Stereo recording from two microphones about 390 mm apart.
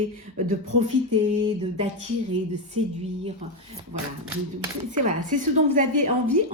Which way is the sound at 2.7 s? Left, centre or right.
Centre.